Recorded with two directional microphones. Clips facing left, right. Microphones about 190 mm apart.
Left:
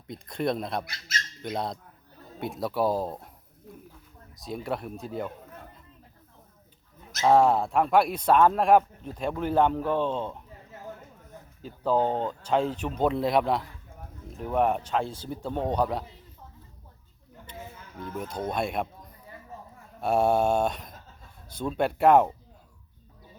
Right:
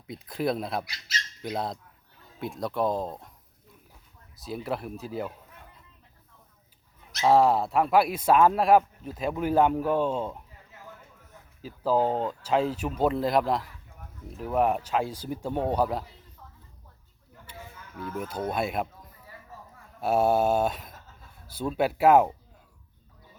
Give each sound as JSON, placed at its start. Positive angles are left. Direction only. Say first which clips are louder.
{"t": 0.1, "sound": "speech", "louder": "even", "side_deg": -5}
{"t": 0.9, "sound": "speech", "louder": "left 1 dB", "side_deg": 50}
{"t": 1.4, "sound": "speech", "louder": "even", "side_deg": 0}
{"t": 4.4, "sound": "speech", "louder": "even", "side_deg": 0}
{"t": 7.2, "sound": "speech", "louder": "even", "side_deg": 0}
{"t": 11.6, "sound": "speech", "louder": "even", "side_deg": -5}
{"t": 18.2, "sound": "speech", "louder": "even", "side_deg": -5}